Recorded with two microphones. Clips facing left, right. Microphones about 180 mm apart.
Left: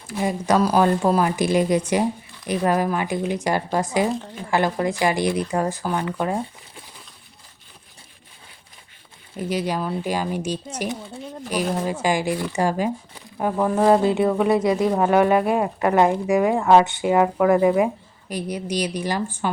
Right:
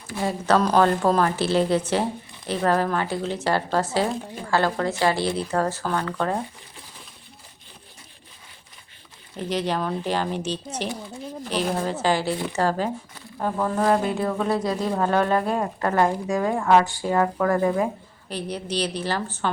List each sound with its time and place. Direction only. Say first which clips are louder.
0.2 s speech: left 1 dB; 15° left (ahead or behind)
9.4 s speech: left 1 dB; 10° left (ahead or behind)